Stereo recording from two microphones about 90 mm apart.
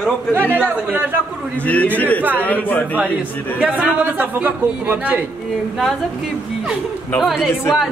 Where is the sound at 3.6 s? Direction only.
15° right (ahead or behind).